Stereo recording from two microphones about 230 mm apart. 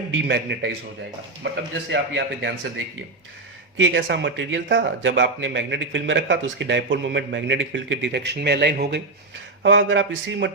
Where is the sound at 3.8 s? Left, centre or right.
Right.